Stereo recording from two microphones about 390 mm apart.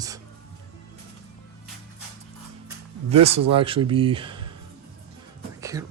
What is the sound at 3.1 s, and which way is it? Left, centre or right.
Speech, centre.